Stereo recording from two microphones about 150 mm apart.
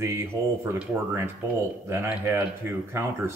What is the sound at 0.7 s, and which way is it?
Speech, 15° right (ahead or behind).